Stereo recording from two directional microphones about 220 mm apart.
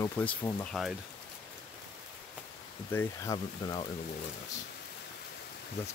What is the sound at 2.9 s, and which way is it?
Speech, 15° left (ahead or behind).